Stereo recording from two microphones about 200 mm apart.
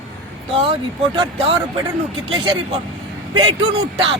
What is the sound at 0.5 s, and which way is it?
A woman's voice, 30° right (ahead or behind).